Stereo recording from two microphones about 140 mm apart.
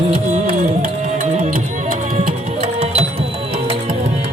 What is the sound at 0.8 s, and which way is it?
Music, 60° right (ahead or behind).